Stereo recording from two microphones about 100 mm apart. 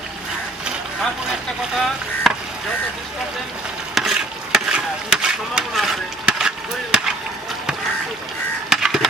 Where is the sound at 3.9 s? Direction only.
5° right (ahead or behind).